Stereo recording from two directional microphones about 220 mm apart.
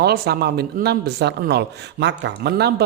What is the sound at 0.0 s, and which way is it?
Speech, 45° right (ahead or behind).